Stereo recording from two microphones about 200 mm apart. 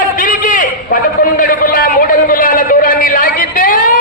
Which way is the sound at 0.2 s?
45° left (ahead or behind).